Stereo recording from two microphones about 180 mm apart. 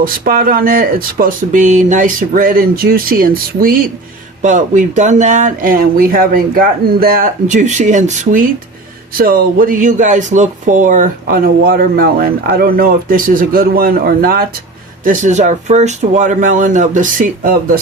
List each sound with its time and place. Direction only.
0.0 s speech: 50° right (ahead or behind)